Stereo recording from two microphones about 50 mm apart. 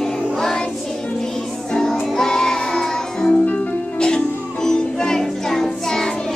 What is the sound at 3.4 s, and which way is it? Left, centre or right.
Music, left.